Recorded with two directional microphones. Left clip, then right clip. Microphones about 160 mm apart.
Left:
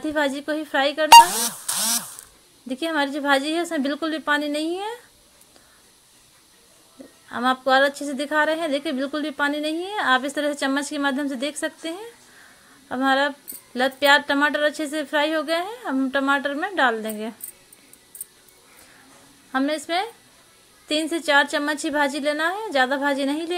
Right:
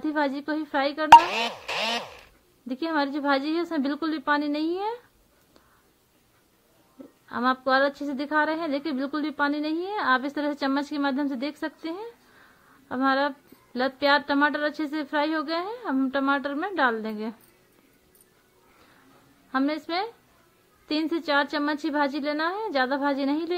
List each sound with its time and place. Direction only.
0.0 s a woman's voice: 10° left (ahead or behind)
1.7 s a sound: 90° left
2.7 s a woman's voice: 10° left (ahead or behind)
7.2 s a woman's voice: 10° left (ahead or behind)
19.5 s a woman's voice: 10° left (ahead or behind)